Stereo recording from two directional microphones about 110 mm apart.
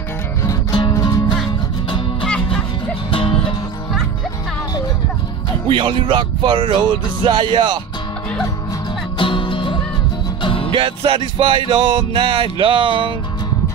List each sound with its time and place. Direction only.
0.4 s music: 35° left (ahead or behind)
2.2 s music: 5° left (ahead or behind)
3.1 s music: 50° left (ahead or behind)
5.7 s music: 50° right (ahead or behind)
9.2 s music: 50° left (ahead or behind)
10.7 s music: 50° right (ahead or behind)